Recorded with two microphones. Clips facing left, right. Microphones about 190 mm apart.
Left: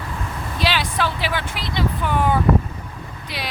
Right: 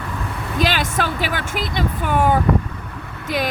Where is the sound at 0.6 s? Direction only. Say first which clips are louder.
Right 2 dB; 45° right (ahead or behind).